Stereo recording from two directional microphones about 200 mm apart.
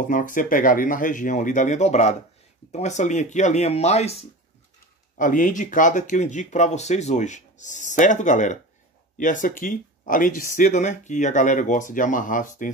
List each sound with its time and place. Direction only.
0.1 s speech: 40° left (ahead or behind)